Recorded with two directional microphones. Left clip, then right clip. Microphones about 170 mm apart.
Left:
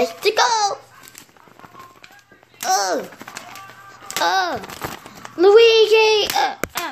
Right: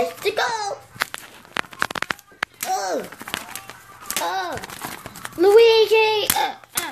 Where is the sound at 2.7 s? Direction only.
15° left (ahead or behind).